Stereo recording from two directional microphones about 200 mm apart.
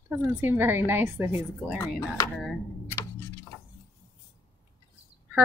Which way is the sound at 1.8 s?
15° left (ahead or behind).